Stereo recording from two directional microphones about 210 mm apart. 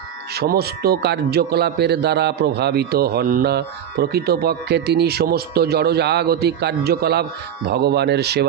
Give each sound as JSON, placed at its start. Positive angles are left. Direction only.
{"t": 0.3, "sound": "speech", "side_deg": -50}